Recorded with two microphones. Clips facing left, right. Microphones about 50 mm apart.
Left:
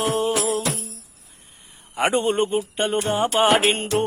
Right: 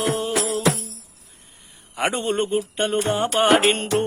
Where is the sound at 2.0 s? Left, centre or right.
Left.